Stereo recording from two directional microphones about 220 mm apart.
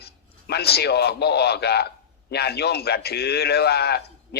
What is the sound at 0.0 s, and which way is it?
A man's voice, 45° left (ahead or behind).